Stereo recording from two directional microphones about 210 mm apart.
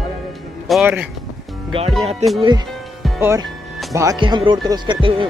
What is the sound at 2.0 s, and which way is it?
Speech, 30° right (ahead or behind).